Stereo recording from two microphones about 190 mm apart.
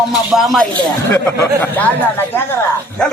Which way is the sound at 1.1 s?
15° left (ahead or behind).